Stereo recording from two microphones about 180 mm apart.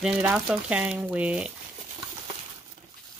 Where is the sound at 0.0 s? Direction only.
5° right (ahead or behind).